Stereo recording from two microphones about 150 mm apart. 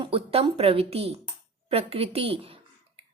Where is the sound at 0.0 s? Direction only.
40° right (ahead or behind).